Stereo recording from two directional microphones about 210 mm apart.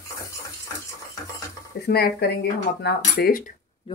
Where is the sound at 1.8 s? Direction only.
50° left (ahead or behind).